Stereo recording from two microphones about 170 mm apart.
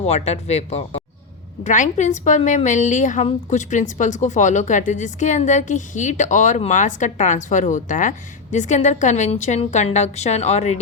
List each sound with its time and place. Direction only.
0.0 s a woman's voice: 40° left (ahead or behind)